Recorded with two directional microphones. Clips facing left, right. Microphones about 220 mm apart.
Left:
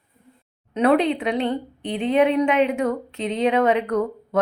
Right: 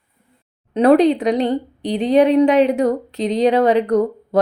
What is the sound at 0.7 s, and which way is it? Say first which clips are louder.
A woman's voice: right 6 dB; 40° right (ahead or behind).